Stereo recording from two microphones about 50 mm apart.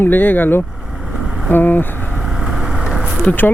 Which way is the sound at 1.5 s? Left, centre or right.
Left.